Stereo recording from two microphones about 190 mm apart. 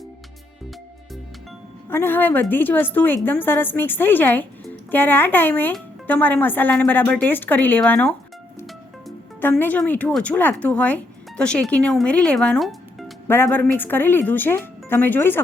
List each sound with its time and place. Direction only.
1.9 s a woman's voice: 10° left (ahead or behind)
9.4 s a woman's voice: 10° left (ahead or behind)
13.2 s a woman's voice: 10° left (ahead or behind)